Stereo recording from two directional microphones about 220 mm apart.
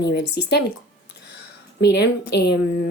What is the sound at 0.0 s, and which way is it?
Speech, 50° left (ahead or behind).